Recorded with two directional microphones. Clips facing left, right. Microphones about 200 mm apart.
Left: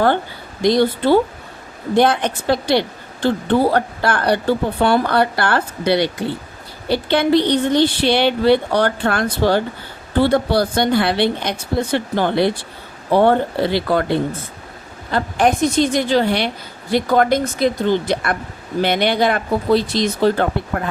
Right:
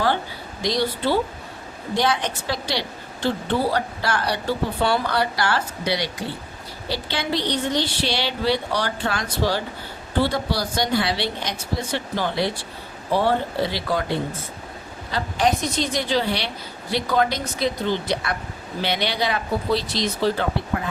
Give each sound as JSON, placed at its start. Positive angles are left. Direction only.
{"t": 0.6, "sound": "a woman's voice", "side_deg": 55}
{"t": 15.1, "sound": "speech", "side_deg": 55}